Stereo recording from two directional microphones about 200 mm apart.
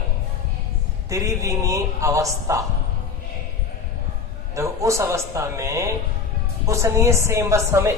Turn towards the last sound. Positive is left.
turn(degrees=-15)  # may be behind; listen again after turning